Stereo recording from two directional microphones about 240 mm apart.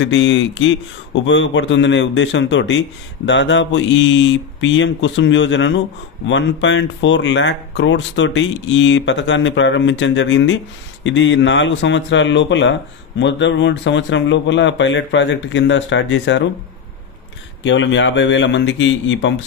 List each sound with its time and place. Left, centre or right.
0.0 s speech: left
17.6 s speech: left